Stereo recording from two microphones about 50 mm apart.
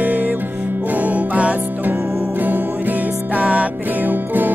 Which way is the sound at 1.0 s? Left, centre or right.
Right.